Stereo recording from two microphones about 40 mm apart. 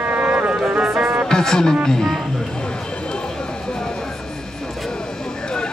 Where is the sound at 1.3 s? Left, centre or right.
Centre.